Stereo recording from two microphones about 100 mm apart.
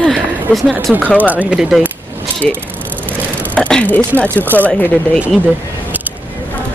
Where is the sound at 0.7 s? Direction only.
20° right (ahead or behind).